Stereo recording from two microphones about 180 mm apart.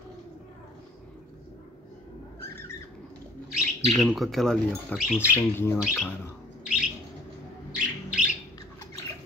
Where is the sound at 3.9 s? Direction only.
Centre (ahead or behind).